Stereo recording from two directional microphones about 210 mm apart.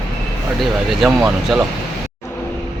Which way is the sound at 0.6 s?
Centre (ahead or behind).